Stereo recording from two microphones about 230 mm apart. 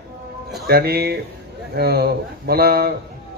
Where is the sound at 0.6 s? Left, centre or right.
Right.